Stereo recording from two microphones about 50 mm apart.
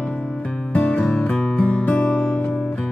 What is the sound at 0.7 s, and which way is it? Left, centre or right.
Music, left.